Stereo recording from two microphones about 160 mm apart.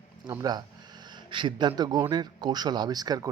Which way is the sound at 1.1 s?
30° right (ahead or behind).